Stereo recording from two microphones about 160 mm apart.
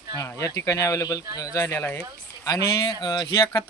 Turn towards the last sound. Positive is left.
turn(degrees=25)  # may be behind; listen again after turning